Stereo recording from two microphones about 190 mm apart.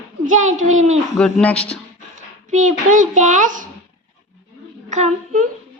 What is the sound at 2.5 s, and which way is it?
A child's voice, 40° right (ahead or behind).